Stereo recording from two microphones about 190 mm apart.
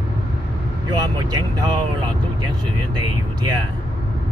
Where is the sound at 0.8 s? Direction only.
20° right (ahead or behind).